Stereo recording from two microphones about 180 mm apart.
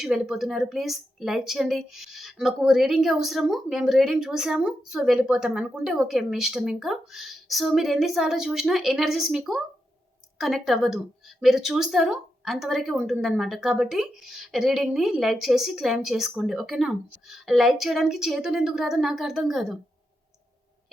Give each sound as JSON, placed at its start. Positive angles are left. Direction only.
{"t": 0.0, "sound": "a woman's voice", "side_deg": 0}